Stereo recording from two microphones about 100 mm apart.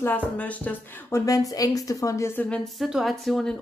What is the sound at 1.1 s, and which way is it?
Speech, 35° left (ahead or behind).